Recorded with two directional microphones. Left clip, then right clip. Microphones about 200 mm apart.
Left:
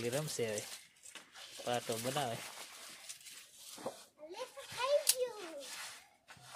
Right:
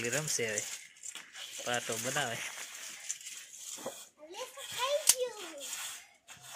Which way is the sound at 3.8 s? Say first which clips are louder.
Right 1 dB; 25° left (ahead or behind).